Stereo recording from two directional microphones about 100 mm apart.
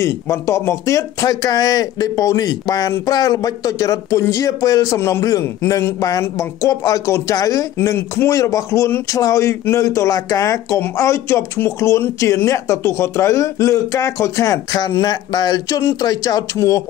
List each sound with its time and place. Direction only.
0.0 s speech: 30° left (ahead or behind)